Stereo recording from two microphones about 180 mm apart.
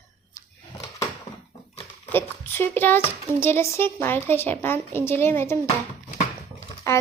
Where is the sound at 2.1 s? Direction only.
10° left (ahead or behind).